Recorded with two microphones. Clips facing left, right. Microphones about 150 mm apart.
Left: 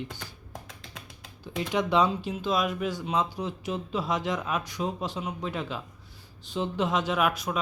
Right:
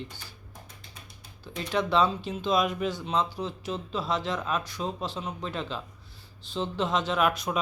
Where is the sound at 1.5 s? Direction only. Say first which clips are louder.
Left 1 dB; 15° left (ahead or behind).